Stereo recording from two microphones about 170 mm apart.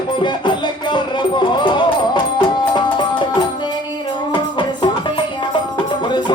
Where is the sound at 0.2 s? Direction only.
30° left (ahead or behind).